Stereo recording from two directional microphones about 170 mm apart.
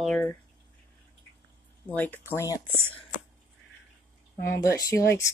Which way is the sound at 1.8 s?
10° left (ahead or behind).